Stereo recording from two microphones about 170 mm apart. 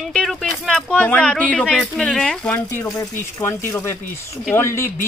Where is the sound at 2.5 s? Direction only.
15° left (ahead or behind).